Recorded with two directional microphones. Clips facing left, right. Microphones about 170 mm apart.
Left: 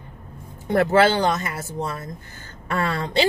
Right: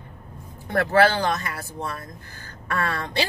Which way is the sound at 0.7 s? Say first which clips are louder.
Left 2 dB; 20° left (ahead or behind).